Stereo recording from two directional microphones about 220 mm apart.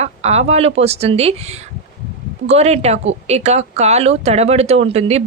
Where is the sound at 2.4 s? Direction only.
30° right (ahead or behind).